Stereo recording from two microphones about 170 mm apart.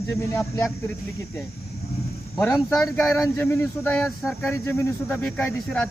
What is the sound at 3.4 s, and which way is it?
Speech, 15° left (ahead or behind).